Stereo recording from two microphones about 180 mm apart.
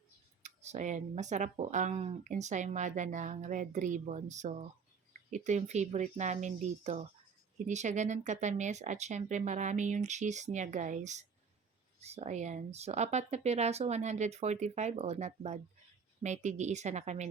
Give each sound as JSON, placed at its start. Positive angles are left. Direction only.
{"t": 0.4, "sound": "speech", "side_deg": -40}